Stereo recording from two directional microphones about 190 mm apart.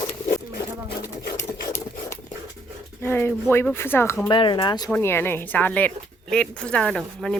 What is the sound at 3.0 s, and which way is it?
Speech, 10° left (ahead or behind).